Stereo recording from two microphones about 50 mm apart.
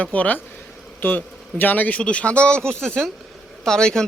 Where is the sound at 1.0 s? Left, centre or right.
Left.